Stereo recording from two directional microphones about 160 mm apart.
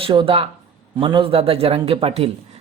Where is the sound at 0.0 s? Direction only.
30° right (ahead or behind).